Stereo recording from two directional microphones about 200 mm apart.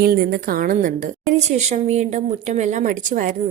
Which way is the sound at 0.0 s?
50° right (ahead or behind).